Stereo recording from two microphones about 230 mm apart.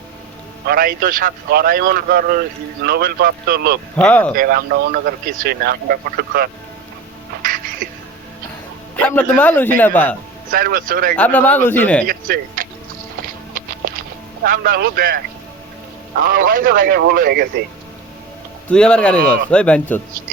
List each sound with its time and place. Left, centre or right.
0.7 s speech: right
3.9 s speech: centre
4.4 s speech: right
9.0 s a man's voice: centre
10.5 s speech: right
11.1 s speech: centre
12.0 s speech: right
14.4 s speech: right
16.2 s speech: right
18.7 s speech: centre
19.2 s speech: right
19.5 s speech: centre